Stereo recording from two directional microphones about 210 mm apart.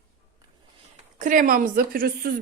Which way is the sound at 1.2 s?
40° right (ahead or behind).